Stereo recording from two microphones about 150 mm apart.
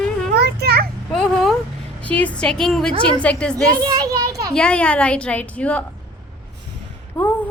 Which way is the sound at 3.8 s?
25° right (ahead or behind).